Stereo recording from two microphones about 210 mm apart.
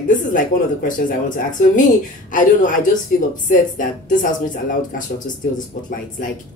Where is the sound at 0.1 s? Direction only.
40° left (ahead or behind).